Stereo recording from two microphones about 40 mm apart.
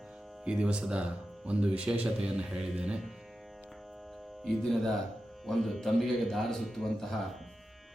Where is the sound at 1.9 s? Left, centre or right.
Right.